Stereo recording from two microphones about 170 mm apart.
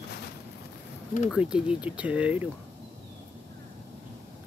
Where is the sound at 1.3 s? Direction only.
5° right (ahead or behind).